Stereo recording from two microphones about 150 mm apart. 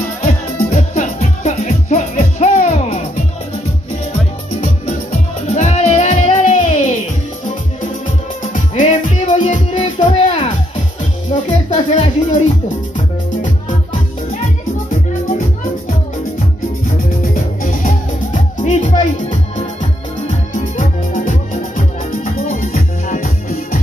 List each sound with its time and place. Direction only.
0.2 s music: 55° left (ahead or behind)
5.5 s music: 50° left (ahead or behind)
8.5 s music: 50° left (ahead or behind)
17.2 s music: 65° left (ahead or behind)